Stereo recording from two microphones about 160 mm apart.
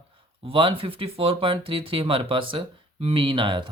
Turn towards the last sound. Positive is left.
turn(degrees=-30)  # may be behind; listen again after turning